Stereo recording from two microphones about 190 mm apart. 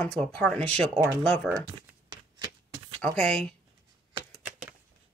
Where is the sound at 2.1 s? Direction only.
25° right (ahead or behind).